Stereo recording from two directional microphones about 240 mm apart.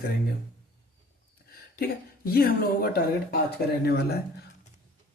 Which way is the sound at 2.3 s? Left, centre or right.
Left.